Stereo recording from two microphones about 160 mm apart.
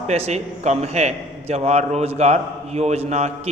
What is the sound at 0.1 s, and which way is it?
A man's voice, 45° right (ahead or behind).